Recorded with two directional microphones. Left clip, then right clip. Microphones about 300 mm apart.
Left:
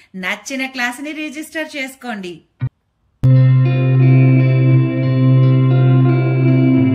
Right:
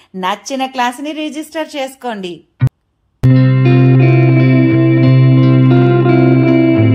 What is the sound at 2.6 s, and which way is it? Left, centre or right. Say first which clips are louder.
Music: right 9 dB; centre.